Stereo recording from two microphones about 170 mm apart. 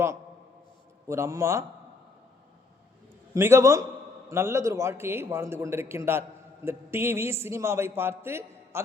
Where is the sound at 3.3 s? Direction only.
15° right (ahead or behind).